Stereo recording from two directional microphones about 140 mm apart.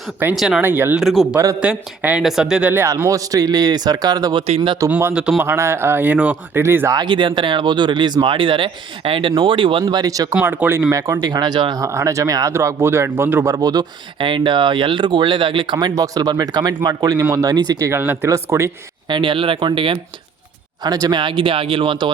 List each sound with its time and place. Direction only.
0.3 s speech: 5° right (ahead or behind)
1.0 s a man's voice: centre (ahead or behind)
1.4 s speech: 25° right (ahead or behind)
2.0 s speech: 10° right (ahead or behind); by 4.4 s 30° right (ahead or behind)
4.4 s speech: 45° right (ahead or behind)
5.1 s speech: 5° right (ahead or behind)
5.5 s speech: 20° right (ahead or behind)
7.0 s speech: 35° right (ahead or behind)
9.8 s speech: 25° right (ahead or behind)
10.3 s speech: 10° right (ahead or behind)
10.9 s speech: 25° right (ahead or behind)
19.0 s speech: 35° right (ahead or behind)